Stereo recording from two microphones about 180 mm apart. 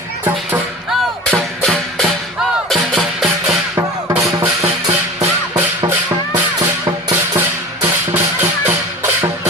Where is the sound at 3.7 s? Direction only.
15° right (ahead or behind).